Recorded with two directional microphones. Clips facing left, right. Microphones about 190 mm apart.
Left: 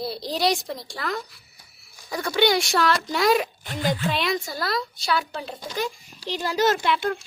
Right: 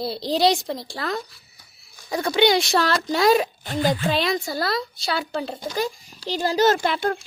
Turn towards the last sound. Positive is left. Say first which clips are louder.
# right 2 dB
turn(degrees=-35)  # may be behind; listen again after turning